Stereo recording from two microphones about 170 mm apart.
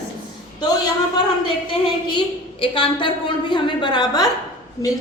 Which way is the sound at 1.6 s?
30° left (ahead or behind).